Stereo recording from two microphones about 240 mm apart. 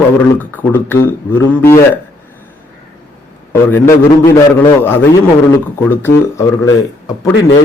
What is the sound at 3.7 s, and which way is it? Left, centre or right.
Speech, centre.